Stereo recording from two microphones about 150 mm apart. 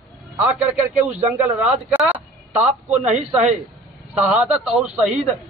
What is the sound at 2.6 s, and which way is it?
Speech, 50° right (ahead or behind).